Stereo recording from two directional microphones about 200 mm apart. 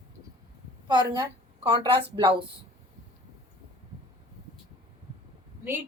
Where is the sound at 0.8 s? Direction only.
20° right (ahead or behind).